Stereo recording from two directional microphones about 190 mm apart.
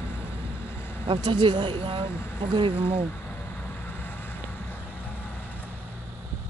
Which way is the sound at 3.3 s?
10° left (ahead or behind).